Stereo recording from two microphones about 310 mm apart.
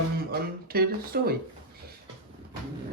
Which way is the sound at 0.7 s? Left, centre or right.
Right.